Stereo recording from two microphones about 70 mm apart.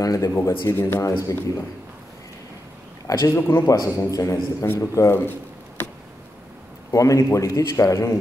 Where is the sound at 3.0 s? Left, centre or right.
Left.